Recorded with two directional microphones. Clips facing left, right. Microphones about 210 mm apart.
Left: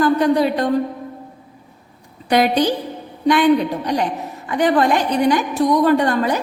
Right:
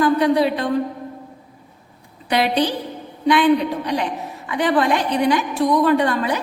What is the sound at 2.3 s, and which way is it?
Speech, 45° left (ahead or behind).